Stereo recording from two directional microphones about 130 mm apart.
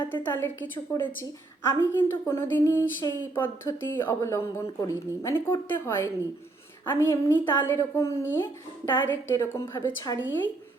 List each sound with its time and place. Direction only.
0.1 s a woman's voice: 15° left (ahead or behind)